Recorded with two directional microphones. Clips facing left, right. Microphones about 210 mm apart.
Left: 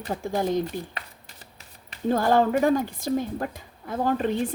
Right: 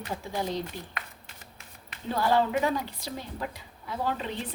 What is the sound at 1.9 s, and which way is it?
Speech, 45° left (ahead or behind).